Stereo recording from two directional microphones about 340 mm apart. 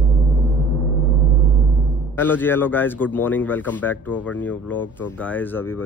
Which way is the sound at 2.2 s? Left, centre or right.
Centre.